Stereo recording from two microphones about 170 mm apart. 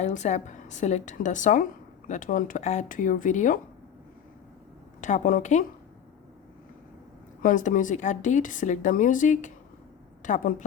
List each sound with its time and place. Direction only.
0.0 s a woman's voice: 45° left (ahead or behind)
4.9 s a woman's voice: 45° left (ahead or behind)
7.4 s a woman's voice: 50° left (ahead or behind)